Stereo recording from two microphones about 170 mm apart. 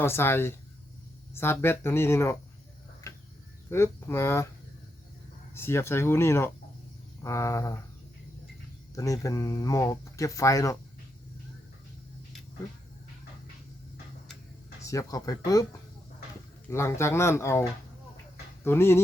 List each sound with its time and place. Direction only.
0.0 s speech: 15° left (ahead or behind)
3.7 s speech: 15° left (ahead or behind)
5.5 s speech: 15° left (ahead or behind)
9.0 s speech: 20° left (ahead or behind)
14.8 s speech: 20° left (ahead or behind)
16.6 s speech: 15° left (ahead or behind)